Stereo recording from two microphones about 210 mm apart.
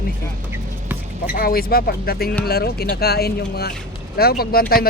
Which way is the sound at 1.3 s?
45° left (ahead or behind).